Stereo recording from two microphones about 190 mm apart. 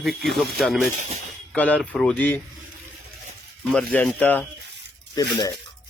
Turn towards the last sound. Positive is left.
turn(degrees=20)  # may be behind; listen again after turning